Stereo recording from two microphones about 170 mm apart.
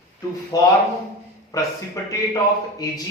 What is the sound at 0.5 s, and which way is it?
A man's voice, 20° left (ahead or behind).